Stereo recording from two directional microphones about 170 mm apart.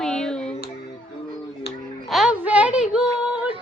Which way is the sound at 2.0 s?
Centre (ahead or behind).